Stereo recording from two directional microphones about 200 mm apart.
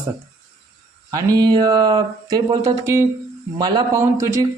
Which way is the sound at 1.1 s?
15° right (ahead or behind).